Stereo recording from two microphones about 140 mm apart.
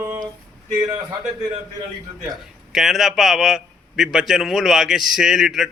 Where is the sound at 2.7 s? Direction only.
Centre (ahead or behind).